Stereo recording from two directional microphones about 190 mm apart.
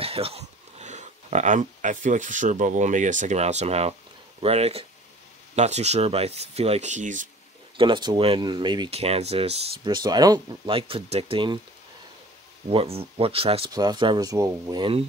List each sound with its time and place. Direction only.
0.0 s speech: 30° right (ahead or behind)
7.7 s speech: 25° right (ahead or behind)
12.6 s speech: 30° right (ahead or behind)